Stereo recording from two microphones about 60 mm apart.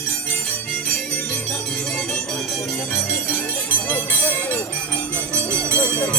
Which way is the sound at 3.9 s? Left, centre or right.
Left.